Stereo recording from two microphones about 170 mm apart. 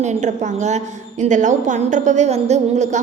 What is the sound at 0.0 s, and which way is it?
A woman's voice, 45° right (ahead or behind).